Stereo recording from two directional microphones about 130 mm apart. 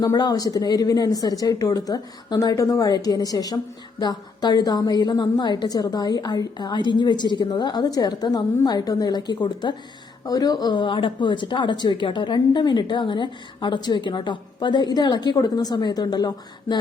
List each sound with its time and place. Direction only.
0.0 s a woman's voice: 30° left (ahead or behind)